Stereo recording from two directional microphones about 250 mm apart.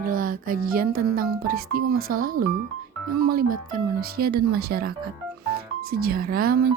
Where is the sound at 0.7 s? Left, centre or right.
Right.